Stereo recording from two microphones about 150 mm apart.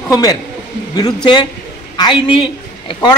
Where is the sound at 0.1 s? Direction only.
25° left (ahead or behind).